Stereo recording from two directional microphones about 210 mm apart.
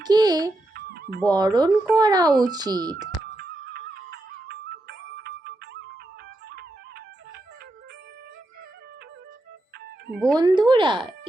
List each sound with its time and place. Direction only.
0.0 s speech: 20° right (ahead or behind)
0.7 s music: 50° right (ahead or behind)
1.2 s speech: 20° right (ahead or behind)
3.3 s music: 50° right (ahead or behind)
10.3 s speech: 20° right (ahead or behind)